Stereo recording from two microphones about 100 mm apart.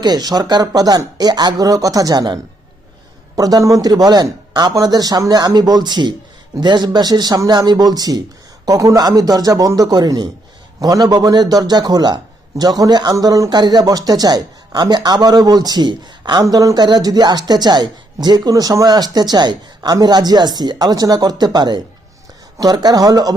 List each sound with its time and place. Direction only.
0.0 s a woman's voice: 45° right (ahead or behind)
16.4 s a woman's voice: 35° right (ahead or behind)